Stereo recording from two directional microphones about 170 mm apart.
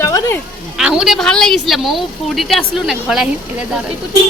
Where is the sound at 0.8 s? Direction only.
5° right (ahead or behind).